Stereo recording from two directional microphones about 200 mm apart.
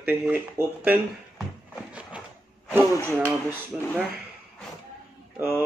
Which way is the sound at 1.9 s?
5° right (ahead or behind).